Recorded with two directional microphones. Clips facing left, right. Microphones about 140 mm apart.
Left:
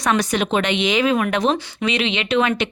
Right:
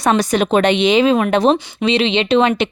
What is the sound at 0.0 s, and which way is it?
A woman's voice, 30° right (ahead or behind).